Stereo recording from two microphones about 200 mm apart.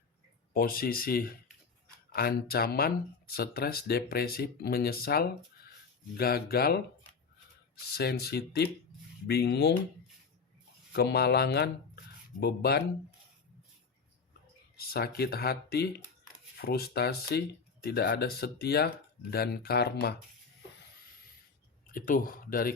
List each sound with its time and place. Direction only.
0.5 s speech: 45° left (ahead or behind)
7.9 s speech: 50° left (ahead or behind)
10.9 s speech: 50° left (ahead or behind)
14.8 s speech: 50° left (ahead or behind)
21.9 s speech: 45° left (ahead or behind)